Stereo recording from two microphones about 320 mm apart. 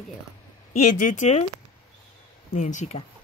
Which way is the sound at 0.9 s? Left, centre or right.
Left.